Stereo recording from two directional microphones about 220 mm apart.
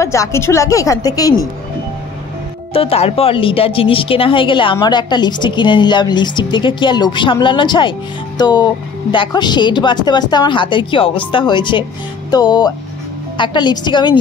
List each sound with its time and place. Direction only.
0.0 s speech: 15° left (ahead or behind)
2.7 s speech: 25° left (ahead or behind)